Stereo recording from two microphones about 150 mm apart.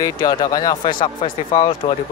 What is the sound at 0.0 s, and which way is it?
Speech, 30° left (ahead or behind).